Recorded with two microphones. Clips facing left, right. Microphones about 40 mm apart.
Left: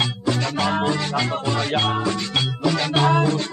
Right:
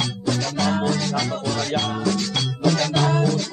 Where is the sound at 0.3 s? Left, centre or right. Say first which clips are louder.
Even; left.